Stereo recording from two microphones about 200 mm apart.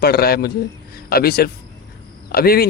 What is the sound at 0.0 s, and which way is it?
Speech, 50° left (ahead or behind).